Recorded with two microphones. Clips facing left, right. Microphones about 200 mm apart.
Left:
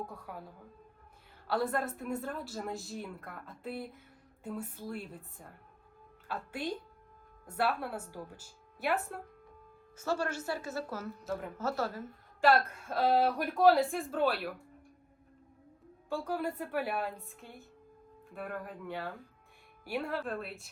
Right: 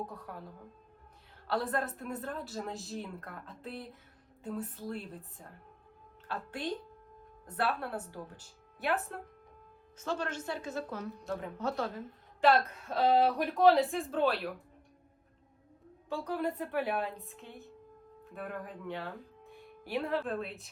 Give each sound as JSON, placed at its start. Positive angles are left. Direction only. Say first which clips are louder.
{"t": 0.1, "sound": "a woman's voice", "louder": "even", "side_deg": 5}
{"t": 16.1, "sound": "a woman's voice", "louder": "right 1 dB", "side_deg": 0}